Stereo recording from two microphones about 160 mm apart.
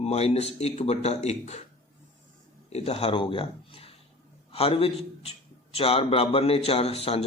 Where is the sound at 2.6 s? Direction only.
40° left (ahead or behind).